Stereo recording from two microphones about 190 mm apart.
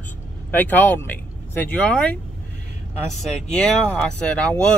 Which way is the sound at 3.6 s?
5° left (ahead or behind).